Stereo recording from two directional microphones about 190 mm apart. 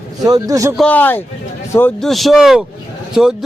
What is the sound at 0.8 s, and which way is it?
Speech, 10° left (ahead or behind).